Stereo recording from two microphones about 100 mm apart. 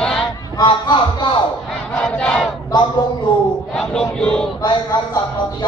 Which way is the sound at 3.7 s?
5° left (ahead or behind).